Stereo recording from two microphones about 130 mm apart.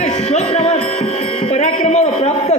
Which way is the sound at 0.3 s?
55° left (ahead or behind).